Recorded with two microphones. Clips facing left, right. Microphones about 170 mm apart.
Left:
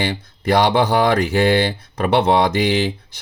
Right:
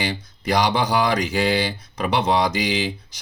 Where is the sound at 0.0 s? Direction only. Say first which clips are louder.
Left 4 dB; 55° left (ahead or behind).